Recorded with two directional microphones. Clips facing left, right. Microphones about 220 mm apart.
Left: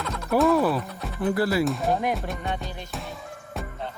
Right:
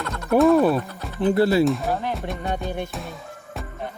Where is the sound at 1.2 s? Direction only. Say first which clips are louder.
Right 5 dB; 25° right (ahead or behind).